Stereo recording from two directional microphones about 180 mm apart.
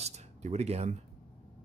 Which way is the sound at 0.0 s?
40° right (ahead or behind).